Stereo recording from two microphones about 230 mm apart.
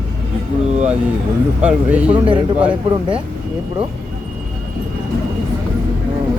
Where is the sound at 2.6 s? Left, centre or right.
Centre.